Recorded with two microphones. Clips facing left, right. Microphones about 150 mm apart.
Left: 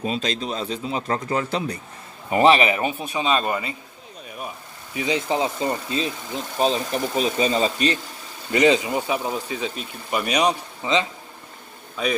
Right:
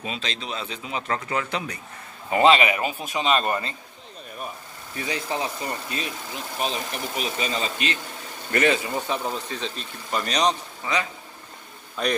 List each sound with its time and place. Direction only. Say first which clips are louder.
0.0 s a man's voice: left 7 dB; 40° left (ahead or behind); by 3.1 s 25° left (ahead or behind)
3.2 s speech: even; 15° left (ahead or behind)
4.9 s a man's voice: left 6 dB; 20° left (ahead or behind); by 8.0 s 35° left (ahead or behind)
8.5 s speech: left 4 dB; 20° left (ahead or behind)
12.0 s a man's voice: left 1 dB; centre (ahead or behind)